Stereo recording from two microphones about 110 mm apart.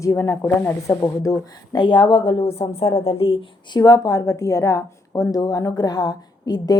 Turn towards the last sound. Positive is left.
turn(degrees=35)  # may be behind; listen again after turning